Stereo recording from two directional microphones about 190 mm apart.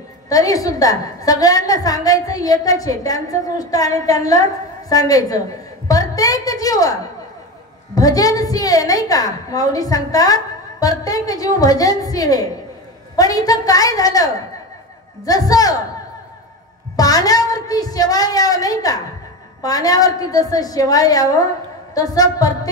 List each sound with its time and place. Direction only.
0.3 s a woman's voice: 20° left (ahead or behind)
16.9 s a woman's voice: 20° left (ahead or behind)